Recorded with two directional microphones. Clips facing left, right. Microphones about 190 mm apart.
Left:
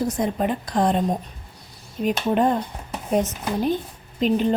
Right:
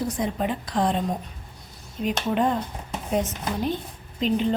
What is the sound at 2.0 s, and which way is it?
Speech, 45° left (ahead or behind).